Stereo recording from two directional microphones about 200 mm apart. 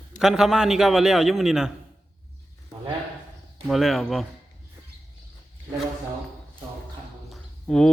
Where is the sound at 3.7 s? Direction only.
Centre (ahead or behind).